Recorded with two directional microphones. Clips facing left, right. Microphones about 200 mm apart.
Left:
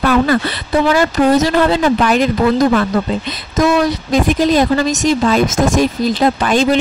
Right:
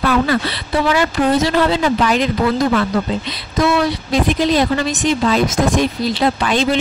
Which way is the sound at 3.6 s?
45° left (ahead or behind).